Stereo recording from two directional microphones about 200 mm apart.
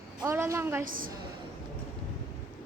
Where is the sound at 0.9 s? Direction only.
45° right (ahead or behind).